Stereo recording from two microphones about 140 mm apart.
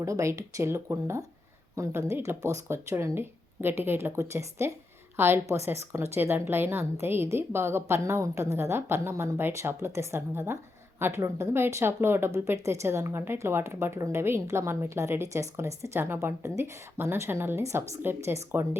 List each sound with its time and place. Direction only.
0.0 s a woman's voice: 20° right (ahead or behind)